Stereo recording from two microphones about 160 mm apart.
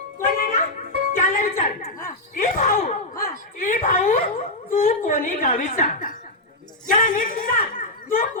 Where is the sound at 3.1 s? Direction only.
20° left (ahead or behind).